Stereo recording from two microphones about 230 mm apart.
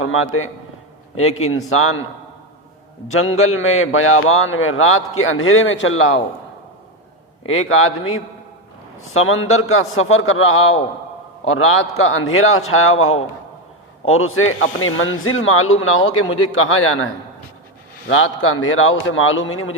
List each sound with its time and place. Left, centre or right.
0.0 s a man's voice: left
3.3 s a man's voice: left
7.4 s a man's voice: left
18.1 s a man's voice: left